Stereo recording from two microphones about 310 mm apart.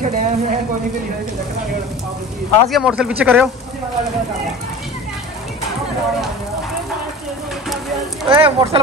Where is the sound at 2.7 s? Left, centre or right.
Centre.